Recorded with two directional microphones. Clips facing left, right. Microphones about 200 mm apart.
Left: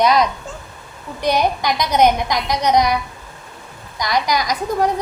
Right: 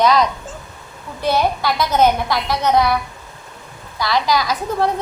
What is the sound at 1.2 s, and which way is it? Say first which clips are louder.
A woman's voice: even; 15° left (ahead or behind).